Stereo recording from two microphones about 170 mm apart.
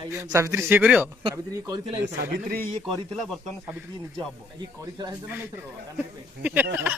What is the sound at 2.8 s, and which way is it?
Speech, centre (ahead or behind).